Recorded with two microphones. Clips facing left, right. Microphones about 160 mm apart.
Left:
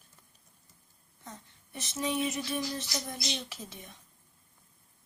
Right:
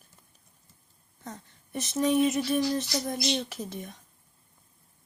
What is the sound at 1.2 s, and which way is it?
A woman's voice, 45° right (ahead or behind).